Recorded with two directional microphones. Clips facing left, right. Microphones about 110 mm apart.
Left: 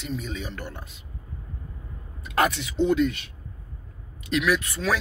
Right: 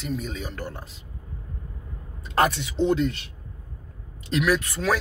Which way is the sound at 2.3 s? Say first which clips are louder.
Right 1 dB; 35° right (ahead or behind).